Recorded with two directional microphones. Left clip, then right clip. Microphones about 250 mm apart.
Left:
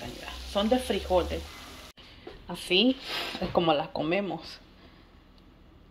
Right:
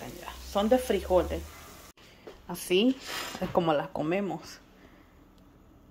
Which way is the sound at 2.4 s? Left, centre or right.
Centre.